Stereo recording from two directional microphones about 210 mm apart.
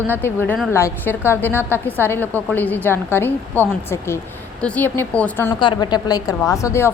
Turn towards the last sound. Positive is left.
turn(degrees=10)  # may be behind; listen again after turning